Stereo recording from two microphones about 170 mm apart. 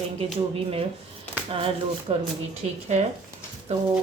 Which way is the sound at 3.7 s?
40° right (ahead or behind).